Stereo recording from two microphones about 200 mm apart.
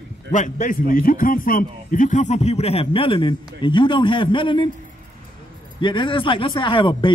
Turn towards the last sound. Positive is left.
turn(degrees=25)  # may be behind; listen again after turning